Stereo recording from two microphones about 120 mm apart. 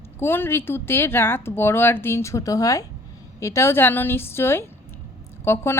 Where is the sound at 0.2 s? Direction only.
20° left (ahead or behind).